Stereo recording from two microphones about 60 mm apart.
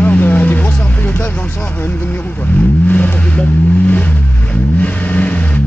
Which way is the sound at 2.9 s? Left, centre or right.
Left.